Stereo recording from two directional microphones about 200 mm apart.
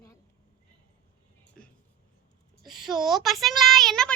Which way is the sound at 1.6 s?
5° left (ahead or behind).